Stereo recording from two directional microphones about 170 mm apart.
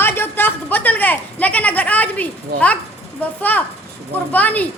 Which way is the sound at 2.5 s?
10° left (ahead or behind).